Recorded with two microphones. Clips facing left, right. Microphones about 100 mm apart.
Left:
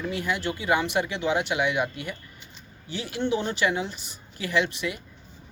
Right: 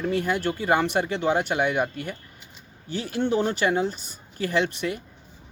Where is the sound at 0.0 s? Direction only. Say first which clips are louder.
Right 4 dB; 45° right (ahead or behind).